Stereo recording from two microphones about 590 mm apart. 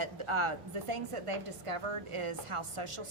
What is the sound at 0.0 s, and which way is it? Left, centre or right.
A woman's voice, right.